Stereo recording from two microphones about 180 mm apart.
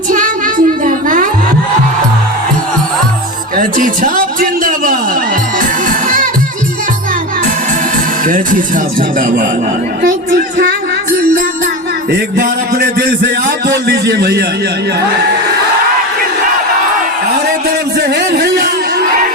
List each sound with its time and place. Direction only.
0.1 s music: 50° right (ahead or behind)
3.6 s a sound: 50° right (ahead or behind)
5.5 s music: 50° right (ahead or behind)
8.2 s speech: 50° right (ahead or behind)
12.1 s a man's voice: 55° right (ahead or behind)
17.9 s a sound: 65° right (ahead or behind)